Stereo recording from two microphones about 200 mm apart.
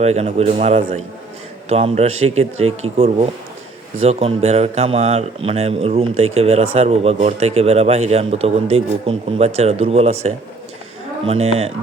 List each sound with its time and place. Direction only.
0.0 s a man's voice: 30° right (ahead or behind)